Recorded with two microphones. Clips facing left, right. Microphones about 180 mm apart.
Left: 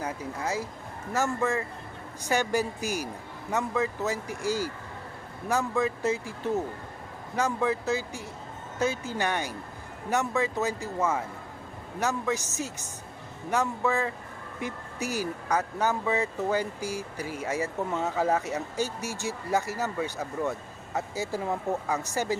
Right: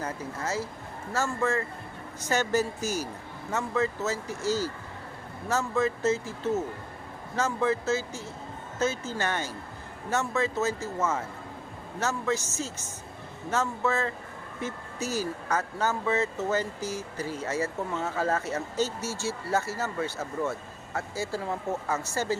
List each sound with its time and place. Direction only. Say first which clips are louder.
0.0 s speech: left 1 dB; 15° left (ahead or behind)